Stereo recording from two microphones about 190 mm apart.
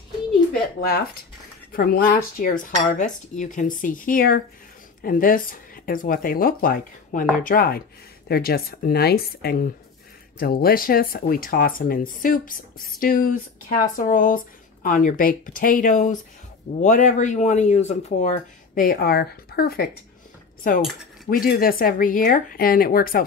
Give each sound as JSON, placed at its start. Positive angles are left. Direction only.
{"t": 0.7, "sound": "speech", "side_deg": 55}
{"t": 18.9, "sound": "speech", "side_deg": 55}
{"t": 21.3, "sound": "speech", "side_deg": 50}